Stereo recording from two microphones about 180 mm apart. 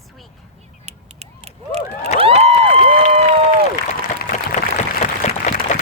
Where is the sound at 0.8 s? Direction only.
35° right (ahead or behind).